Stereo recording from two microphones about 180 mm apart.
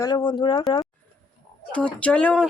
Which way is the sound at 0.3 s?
25° left (ahead or behind).